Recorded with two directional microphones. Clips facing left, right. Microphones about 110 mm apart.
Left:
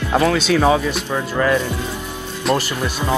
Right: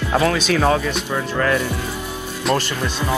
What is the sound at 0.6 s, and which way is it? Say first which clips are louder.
Speech: left 2 dB; 10° left (ahead or behind).